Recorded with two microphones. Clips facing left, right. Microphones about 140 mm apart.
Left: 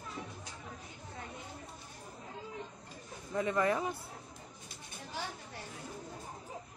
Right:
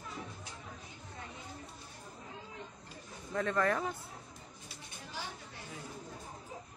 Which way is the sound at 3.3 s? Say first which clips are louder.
Left 1 dB; 10° left (ahead or behind).